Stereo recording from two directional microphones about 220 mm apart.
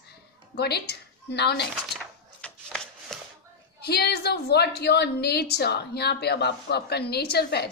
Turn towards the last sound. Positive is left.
turn(degrees=45)  # may be behind; listen again after turning